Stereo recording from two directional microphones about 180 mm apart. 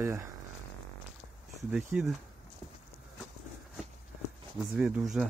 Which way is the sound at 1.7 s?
5° right (ahead or behind).